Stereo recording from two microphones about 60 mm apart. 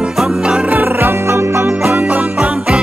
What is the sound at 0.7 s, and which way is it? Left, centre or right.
Music, right.